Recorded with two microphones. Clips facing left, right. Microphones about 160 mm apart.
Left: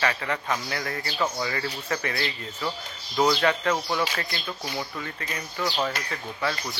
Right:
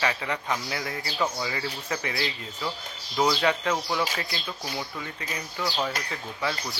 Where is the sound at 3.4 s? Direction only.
15° right (ahead or behind).